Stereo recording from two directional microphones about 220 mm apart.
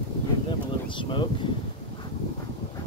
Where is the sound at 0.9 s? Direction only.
20° left (ahead or behind).